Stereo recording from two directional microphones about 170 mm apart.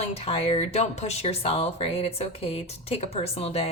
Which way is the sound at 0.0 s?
35° left (ahead or behind).